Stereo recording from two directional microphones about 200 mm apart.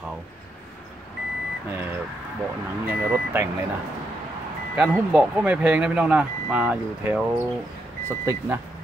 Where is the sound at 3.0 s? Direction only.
10° right (ahead or behind).